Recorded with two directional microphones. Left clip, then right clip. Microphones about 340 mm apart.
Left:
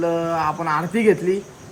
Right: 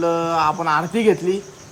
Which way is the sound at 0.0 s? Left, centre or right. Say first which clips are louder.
Right 2 dB; centre.